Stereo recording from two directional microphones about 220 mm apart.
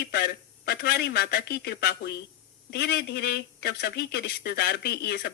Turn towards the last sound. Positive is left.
turn(degrees=45)  # may be behind; listen again after turning